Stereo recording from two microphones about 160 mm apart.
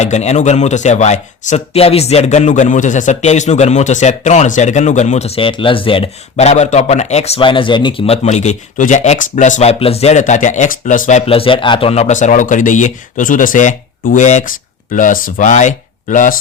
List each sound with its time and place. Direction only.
0.0 s speech: 45° left (ahead or behind)
11.3 s speech: 35° left (ahead or behind); by 16.3 s 55° left (ahead or behind)